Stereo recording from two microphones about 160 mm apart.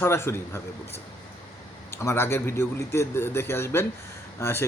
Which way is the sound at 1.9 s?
15° left (ahead or behind).